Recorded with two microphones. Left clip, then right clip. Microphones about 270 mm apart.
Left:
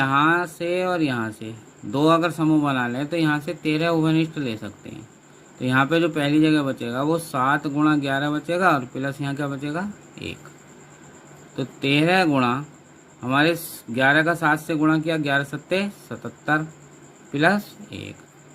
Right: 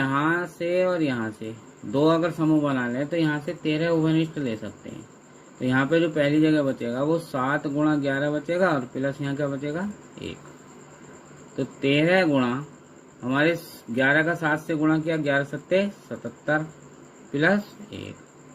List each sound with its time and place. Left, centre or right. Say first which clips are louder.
0.0 s speech: left 5 dB; left
11.5 s speech: left 1 dB; left